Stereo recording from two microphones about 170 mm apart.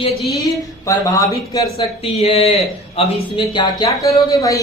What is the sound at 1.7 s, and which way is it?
A woman's voice, 35° left (ahead or behind).